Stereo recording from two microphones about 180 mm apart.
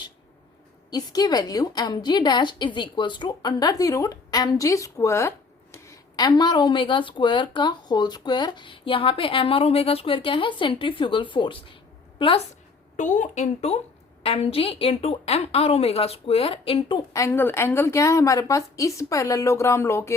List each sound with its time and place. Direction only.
0.9 s speech: 20° left (ahead or behind)
13.0 s a woman's voice: 45° left (ahead or behind)
17.1 s a woman's voice: 15° left (ahead or behind)